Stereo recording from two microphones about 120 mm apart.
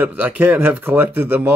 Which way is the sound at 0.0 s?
15° right (ahead or behind).